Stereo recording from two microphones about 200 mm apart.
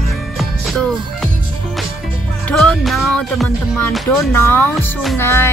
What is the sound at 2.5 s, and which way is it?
Music, centre (ahead or behind).